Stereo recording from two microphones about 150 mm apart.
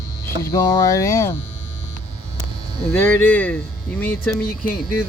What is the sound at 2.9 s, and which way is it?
Speech, 15° left (ahead or behind).